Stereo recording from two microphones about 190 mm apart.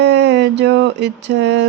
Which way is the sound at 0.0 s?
65° right (ahead or behind).